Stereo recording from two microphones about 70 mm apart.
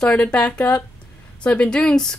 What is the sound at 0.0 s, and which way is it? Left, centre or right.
A woman's voice, centre.